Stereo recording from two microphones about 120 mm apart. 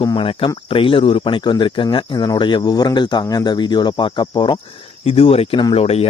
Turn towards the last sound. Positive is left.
turn(degrees=55)  # may be behind; listen again after turning